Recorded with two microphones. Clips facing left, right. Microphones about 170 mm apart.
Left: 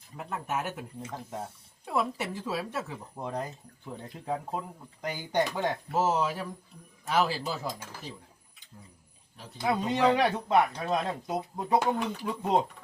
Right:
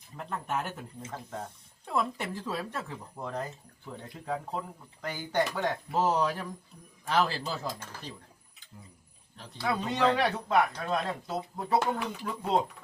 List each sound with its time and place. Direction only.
0.2 s speech: 5° left (ahead or behind)
9.6 s speech: 20° left (ahead or behind)